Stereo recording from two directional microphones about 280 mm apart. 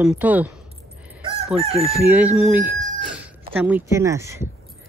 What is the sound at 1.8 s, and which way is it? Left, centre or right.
Speech, centre.